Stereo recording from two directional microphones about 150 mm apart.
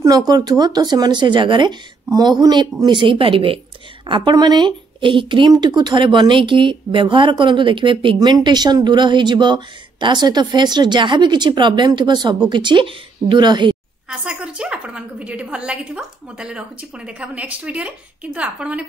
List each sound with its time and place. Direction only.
0.3 s speech: 25° right (ahead or behind)
14.0 s a woman's voice: 5° right (ahead or behind)